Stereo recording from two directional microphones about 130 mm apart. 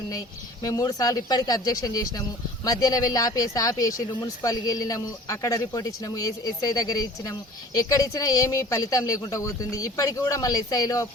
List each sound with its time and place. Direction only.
0.1 s speech: 25° left (ahead or behind)